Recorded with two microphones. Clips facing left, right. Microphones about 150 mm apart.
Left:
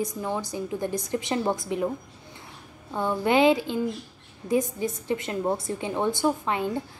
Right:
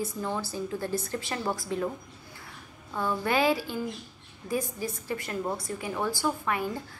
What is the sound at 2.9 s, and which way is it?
A woman's voice, 20° left (ahead or behind).